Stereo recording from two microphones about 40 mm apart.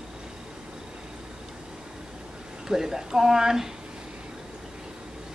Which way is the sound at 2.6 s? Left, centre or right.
Centre.